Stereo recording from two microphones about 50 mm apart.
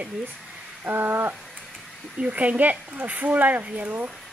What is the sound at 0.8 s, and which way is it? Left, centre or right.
Crow, right.